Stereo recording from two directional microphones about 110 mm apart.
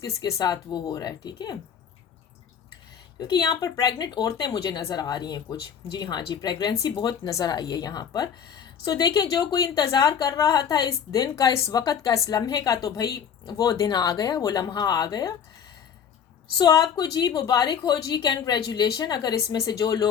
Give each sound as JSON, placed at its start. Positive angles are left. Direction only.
{"t": 0.0, "sound": "a woman's voice", "side_deg": 35}
{"t": 3.2, "sound": "a woman's voice", "side_deg": 40}
{"t": 16.6, "sound": "a woman's voice", "side_deg": 40}